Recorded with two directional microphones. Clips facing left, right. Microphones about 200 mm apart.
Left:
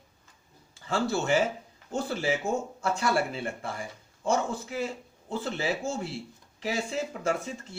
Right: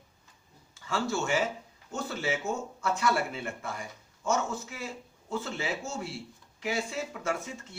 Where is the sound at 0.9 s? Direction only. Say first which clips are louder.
Left 3 dB; 35° left (ahead or behind).